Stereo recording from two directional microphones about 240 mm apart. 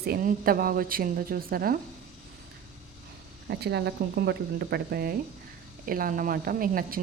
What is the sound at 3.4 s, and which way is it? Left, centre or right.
A woman's voice, right.